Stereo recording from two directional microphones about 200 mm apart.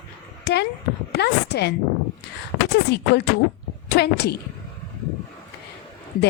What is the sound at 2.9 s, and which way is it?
Speech, 55° left (ahead or behind).